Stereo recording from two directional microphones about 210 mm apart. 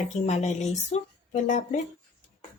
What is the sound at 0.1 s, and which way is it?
Speech, 30° left (ahead or behind).